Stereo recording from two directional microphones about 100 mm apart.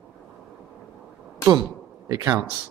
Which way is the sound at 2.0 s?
40° right (ahead or behind).